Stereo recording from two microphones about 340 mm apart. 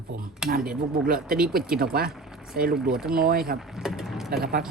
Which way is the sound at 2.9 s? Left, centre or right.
Centre.